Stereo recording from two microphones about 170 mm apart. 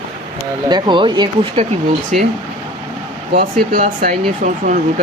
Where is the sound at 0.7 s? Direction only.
25° right (ahead or behind).